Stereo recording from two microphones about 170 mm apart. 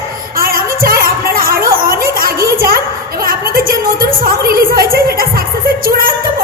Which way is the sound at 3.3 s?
60° right (ahead or behind).